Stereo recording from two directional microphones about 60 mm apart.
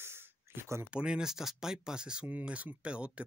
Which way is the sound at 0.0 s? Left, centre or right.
Right.